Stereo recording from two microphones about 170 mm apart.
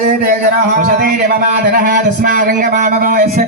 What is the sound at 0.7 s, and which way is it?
A man's voice, 60° right (ahead or behind).